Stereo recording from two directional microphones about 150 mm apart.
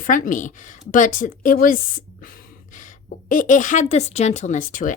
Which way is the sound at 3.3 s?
60° left (ahead or behind).